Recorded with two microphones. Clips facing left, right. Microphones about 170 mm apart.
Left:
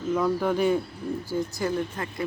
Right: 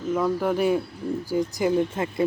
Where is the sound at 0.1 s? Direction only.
5° right (ahead or behind).